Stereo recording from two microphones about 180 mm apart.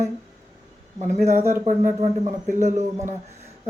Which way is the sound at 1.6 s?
40° right (ahead or behind).